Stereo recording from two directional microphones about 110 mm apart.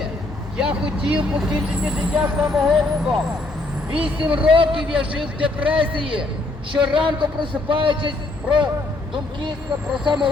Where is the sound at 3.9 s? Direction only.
55° right (ahead or behind).